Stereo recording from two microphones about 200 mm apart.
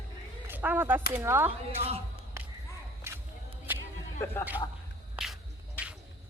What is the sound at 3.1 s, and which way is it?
Whip, 15° right (ahead or behind).